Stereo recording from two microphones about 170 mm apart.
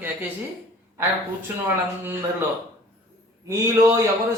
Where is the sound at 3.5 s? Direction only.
20° right (ahead or behind).